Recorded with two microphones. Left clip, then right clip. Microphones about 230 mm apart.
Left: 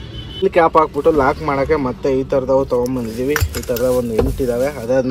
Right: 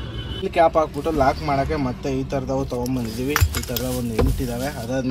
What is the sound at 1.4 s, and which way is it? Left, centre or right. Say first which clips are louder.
Speech: left 6 dB; centre.